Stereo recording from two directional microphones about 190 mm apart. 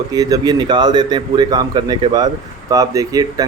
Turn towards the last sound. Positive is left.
turn(degrees=-20)  # may be behind; listen again after turning